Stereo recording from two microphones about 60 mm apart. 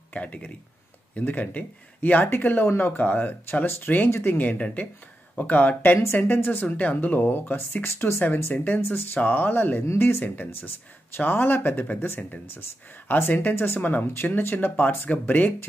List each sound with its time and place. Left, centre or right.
0.1 s speech: left
10.2 s speech: left